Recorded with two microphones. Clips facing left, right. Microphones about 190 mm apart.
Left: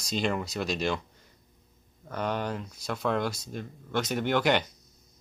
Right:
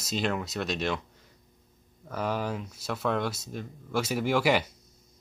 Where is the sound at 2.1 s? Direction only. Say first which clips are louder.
Even; 5° right (ahead or behind).